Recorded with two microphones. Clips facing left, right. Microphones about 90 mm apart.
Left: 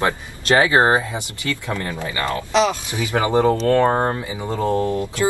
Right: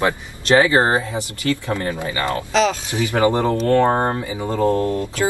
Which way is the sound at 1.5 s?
20° right (ahead or behind).